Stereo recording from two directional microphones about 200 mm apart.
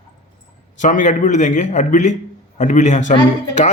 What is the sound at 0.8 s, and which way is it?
Speech, 40° left (ahead or behind).